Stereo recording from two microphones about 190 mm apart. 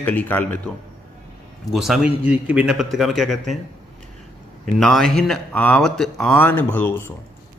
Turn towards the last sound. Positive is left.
turn(degrees=10)  # may be behind; listen again after turning